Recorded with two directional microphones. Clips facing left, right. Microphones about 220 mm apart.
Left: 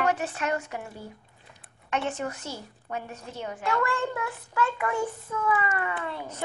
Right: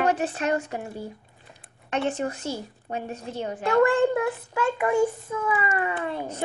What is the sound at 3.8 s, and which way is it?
Child singing, 15° right (ahead or behind).